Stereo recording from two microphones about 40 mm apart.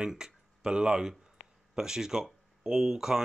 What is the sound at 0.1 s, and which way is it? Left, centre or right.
Speech, centre.